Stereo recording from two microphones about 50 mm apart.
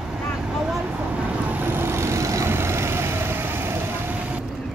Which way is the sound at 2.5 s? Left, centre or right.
Right.